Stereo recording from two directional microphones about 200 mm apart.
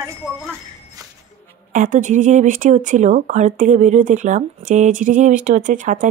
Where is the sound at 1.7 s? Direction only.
40° right (ahead or behind).